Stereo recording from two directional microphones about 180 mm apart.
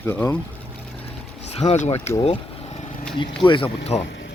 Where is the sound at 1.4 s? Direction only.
40° left (ahead or behind).